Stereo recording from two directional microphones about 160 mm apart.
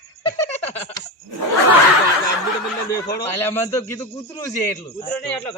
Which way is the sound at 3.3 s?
15° left (ahead or behind).